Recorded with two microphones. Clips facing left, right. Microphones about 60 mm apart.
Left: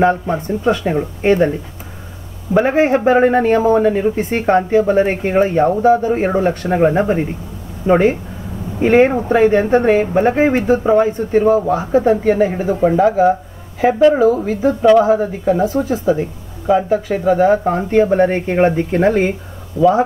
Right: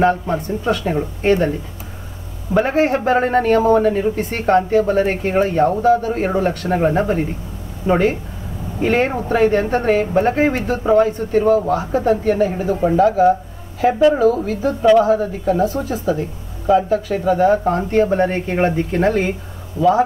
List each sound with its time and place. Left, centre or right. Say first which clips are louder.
0.0 s speech: left 2 dB; left
2.6 s speech: left 3 dB; left
19.8 s speech: left 3 dB; right